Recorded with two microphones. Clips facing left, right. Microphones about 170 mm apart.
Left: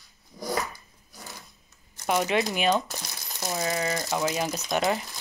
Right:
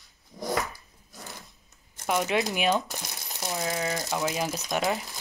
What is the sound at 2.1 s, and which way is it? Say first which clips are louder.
Speech: left 1 dB; centre (ahead or behind).